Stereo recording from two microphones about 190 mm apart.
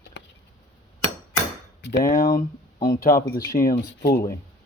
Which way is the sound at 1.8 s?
65° left (ahead or behind).